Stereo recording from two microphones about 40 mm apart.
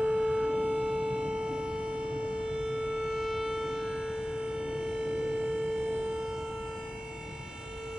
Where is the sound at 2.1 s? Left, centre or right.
Right.